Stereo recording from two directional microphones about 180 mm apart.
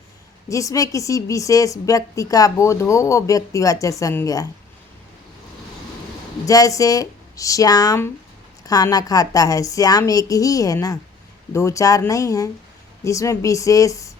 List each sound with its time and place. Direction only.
0.4 s a woman's voice: 15° left (ahead or behind)
6.4 s a woman's voice: 20° left (ahead or behind)